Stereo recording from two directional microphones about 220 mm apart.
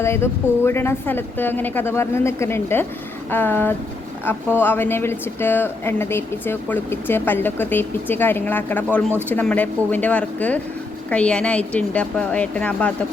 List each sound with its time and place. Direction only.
0.0 s a woman's voice: 10° left (ahead or behind)